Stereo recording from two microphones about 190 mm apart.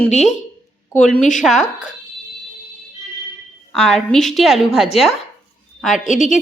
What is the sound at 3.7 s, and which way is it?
Speech, 5° left (ahead or behind).